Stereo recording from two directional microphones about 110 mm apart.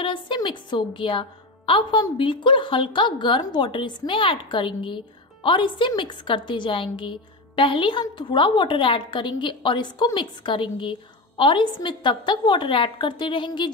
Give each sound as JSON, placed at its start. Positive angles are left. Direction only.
{"t": 0.0, "sound": "a woman's voice", "side_deg": 45}